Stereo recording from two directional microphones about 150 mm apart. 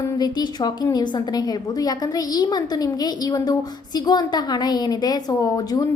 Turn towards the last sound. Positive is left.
turn(degrees=25)  # may be behind; listen again after turning